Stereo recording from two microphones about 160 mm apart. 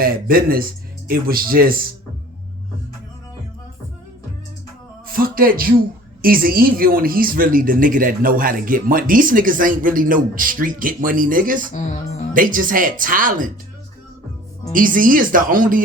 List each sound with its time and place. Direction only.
0.0 s speech: 65° right (ahead or behind)
5.1 s speech: 65° right (ahead or behind)
14.7 s speech: 60° right (ahead or behind)